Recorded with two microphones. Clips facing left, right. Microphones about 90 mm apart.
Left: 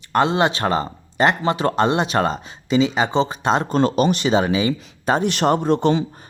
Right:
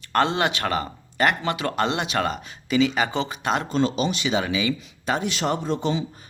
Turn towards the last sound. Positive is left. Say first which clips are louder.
# left 7 dB
turn(degrees=60)  # may be behind; listen again after turning